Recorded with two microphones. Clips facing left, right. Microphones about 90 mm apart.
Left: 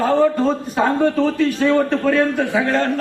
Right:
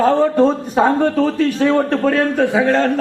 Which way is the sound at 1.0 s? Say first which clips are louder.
Right 1 dB; 35° right (ahead or behind).